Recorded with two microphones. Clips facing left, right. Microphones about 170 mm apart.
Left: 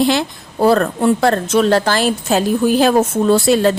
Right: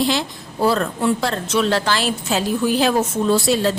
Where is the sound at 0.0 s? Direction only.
55° left (ahead or behind).